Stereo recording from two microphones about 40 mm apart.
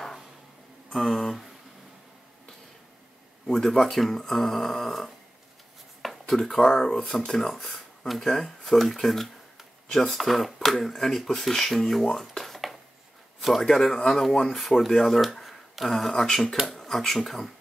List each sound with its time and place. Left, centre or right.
0.9 s speech: centre
3.4 s speech: centre
6.3 s speech: centre